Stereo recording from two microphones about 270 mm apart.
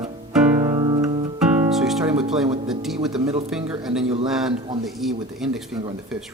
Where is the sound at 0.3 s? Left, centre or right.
Centre.